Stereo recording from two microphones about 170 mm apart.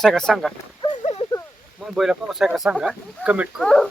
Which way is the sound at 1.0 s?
40° left (ahead or behind).